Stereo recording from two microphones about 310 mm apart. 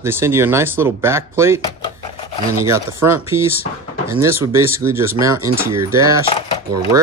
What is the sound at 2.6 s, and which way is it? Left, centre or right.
Speech, centre.